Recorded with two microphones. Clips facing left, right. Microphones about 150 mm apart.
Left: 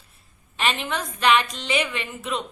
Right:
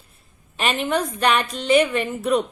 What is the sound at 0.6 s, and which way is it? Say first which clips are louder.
Speech: right 2 dB; 45° right (ahead or behind).